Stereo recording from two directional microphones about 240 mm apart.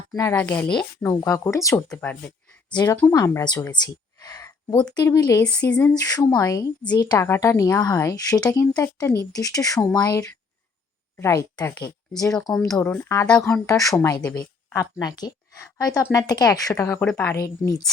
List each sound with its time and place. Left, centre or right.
0.2 s speech: centre